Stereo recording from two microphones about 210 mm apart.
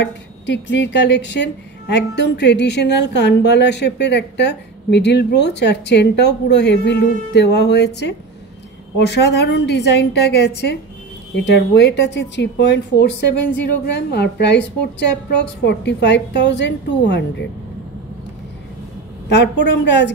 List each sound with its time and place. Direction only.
0.0 s a woman's voice: 55° left (ahead or behind)
19.2 s speech: 55° left (ahead or behind)